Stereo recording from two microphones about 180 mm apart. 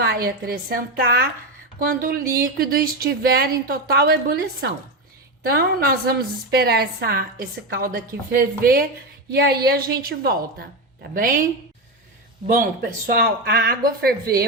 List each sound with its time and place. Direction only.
0.0 s speech: 60° right (ahead or behind)
12.5 s speech: 50° right (ahead or behind)